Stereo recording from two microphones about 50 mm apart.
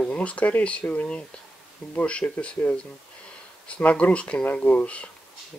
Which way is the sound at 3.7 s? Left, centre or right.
Left.